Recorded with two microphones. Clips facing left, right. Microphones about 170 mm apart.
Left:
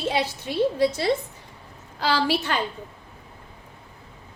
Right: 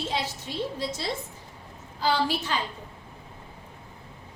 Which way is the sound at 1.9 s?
75° left (ahead or behind).